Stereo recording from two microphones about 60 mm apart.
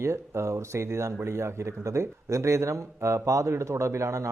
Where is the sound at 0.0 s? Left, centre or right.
Right.